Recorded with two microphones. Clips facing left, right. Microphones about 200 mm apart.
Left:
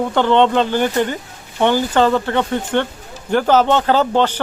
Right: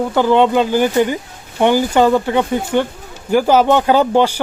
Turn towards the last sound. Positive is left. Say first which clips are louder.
# right 3 dB
turn(degrees=-10)  # may be behind; listen again after turning